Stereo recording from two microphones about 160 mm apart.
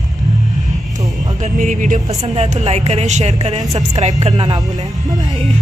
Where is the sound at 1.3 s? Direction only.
50° right (ahead or behind).